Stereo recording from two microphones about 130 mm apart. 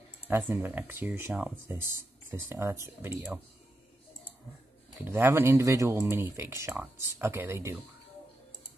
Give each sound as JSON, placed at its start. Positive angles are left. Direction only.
{"t": 0.3, "sound": "speech", "side_deg": -15}
{"t": 5.0, "sound": "speech", "side_deg": -15}